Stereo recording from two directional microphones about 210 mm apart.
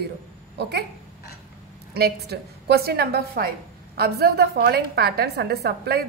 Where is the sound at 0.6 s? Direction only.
50° right (ahead or behind).